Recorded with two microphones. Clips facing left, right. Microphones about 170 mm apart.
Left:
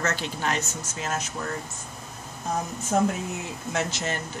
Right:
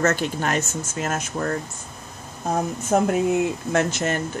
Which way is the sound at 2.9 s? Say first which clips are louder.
Right 6 dB; 55° right (ahead or behind).